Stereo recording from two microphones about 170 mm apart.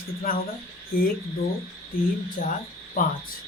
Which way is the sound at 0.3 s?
55° left (ahead or behind).